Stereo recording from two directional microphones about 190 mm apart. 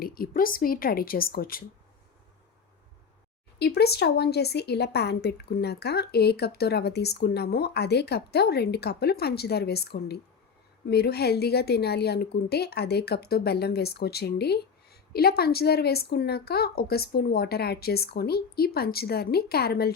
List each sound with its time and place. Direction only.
0.0 s speech: 50° left (ahead or behind)
3.6 s a woman's voice: 60° left (ahead or behind)